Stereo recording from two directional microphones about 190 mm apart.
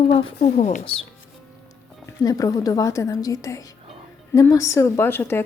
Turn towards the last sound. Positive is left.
turn(degrees=10)  # may be behind; listen again after turning